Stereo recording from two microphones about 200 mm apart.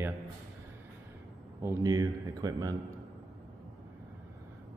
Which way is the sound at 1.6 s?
15° right (ahead or behind).